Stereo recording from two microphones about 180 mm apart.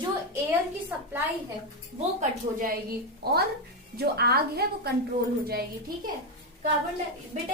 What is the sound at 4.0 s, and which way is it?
Speech, 60° right (ahead or behind).